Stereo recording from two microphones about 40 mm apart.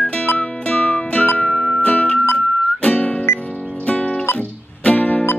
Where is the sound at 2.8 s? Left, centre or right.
Left.